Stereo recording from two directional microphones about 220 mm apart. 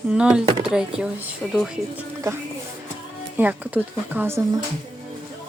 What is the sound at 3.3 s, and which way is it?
Music, 5° right (ahead or behind).